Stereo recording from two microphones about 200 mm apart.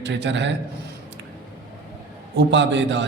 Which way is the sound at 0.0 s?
60° right (ahead or behind).